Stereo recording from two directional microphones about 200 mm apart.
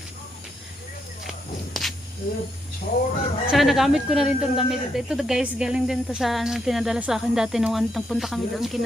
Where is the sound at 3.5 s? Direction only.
Centre (ahead or behind).